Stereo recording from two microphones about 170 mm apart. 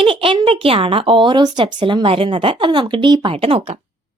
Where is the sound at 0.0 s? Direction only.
30° right (ahead or behind).